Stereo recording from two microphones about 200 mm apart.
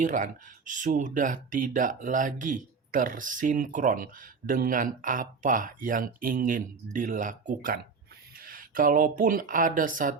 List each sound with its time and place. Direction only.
0.0 s speech: 40° right (ahead or behind)